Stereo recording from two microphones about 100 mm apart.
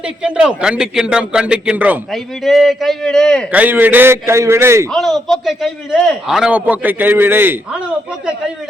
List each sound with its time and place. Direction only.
0.0 s a man's voice: 10° right (ahead or behind)
2.1 s a man's voice: centre (ahead or behind)
3.5 s a man's voice: 15° right (ahead or behind)
4.9 s a man's voice: centre (ahead or behind)
6.5 s a man's voice: 15° right (ahead or behind)